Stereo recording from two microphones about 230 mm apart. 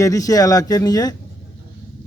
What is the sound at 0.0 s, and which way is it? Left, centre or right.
A man's voice, centre.